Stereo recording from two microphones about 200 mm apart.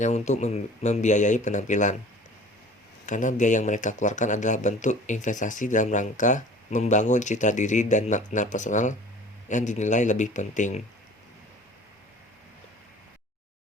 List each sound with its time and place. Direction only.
0.0 s speech: 35° left (ahead or behind)
3.1 s speech: 40° left (ahead or behind)